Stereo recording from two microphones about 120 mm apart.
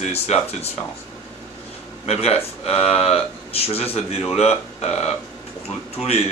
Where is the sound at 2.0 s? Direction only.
60° left (ahead or behind).